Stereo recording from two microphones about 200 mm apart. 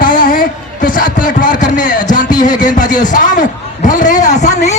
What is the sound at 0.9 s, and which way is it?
Music, 40° left (ahead or behind).